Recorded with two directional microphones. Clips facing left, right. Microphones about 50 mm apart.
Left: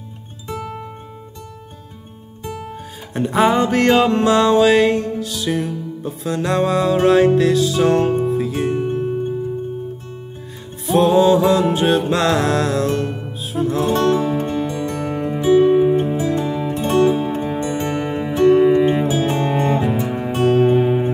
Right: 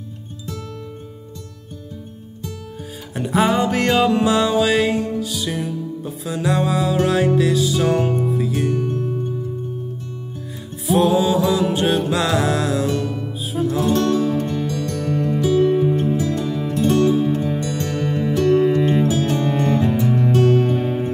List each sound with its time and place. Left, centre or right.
0.5 s music: left
2.4 s music: left
3.1 s music: centre
8.6 s music: left
10.9 s music: centre
13.8 s music: left
20.3 s music: left